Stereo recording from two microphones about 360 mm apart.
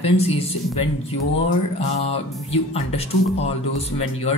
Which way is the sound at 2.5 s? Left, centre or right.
Centre.